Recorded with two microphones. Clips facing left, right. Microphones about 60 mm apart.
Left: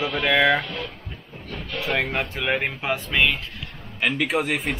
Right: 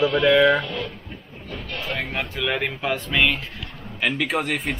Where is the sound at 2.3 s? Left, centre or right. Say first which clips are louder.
Right 2 dB; left.